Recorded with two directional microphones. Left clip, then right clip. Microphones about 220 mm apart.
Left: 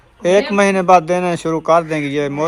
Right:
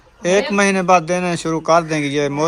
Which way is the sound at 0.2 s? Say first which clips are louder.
Left 3 dB; 10° right (ahead or behind).